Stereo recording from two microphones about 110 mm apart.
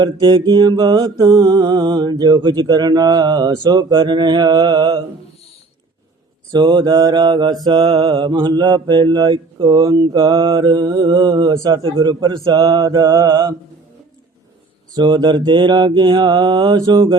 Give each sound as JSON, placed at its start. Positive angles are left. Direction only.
{"t": 0.0, "sound": "mantra", "side_deg": -40}
{"t": 6.5, "sound": "mantra", "side_deg": -40}
{"t": 14.9, "sound": "mantra", "side_deg": -40}